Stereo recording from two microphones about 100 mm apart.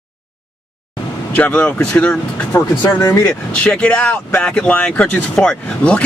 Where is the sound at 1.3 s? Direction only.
15° left (ahead or behind).